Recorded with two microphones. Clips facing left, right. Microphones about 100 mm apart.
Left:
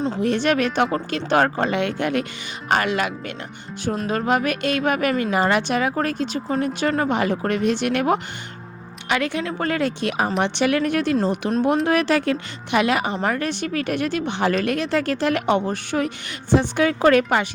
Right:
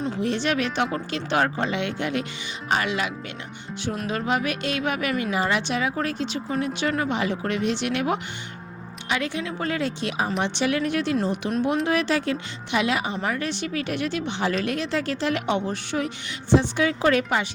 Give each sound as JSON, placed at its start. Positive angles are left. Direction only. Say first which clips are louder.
{"t": 0.2, "sound": "speech", "louder": "left 5 dB", "side_deg": 50}
{"t": 9.0, "sound": "speech", "louder": "left 4 dB", "side_deg": 60}